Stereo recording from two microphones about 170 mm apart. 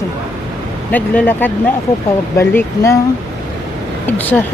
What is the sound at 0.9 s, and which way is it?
Speech, 10° left (ahead or behind).